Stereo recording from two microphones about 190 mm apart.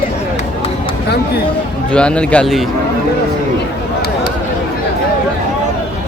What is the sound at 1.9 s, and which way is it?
Speech, 5° left (ahead or behind).